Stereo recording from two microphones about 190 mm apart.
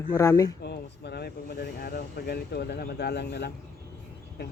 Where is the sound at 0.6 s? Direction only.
60° left (ahead or behind).